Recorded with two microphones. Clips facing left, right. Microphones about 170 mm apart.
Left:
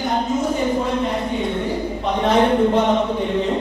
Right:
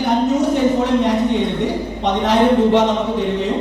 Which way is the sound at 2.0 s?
85° right.